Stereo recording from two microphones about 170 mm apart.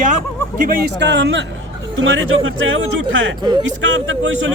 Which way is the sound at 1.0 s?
90° right.